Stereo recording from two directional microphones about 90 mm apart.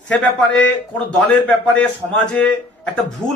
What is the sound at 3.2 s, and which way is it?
Speech, 20° right (ahead or behind).